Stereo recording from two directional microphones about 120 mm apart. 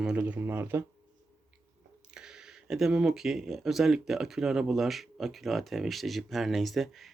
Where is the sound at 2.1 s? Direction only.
5° right (ahead or behind).